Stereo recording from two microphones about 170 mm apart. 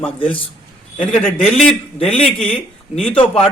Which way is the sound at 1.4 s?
40° left (ahead or behind).